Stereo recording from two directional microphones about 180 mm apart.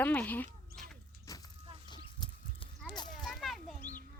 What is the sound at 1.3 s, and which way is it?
Vehicle, 20° left (ahead or behind).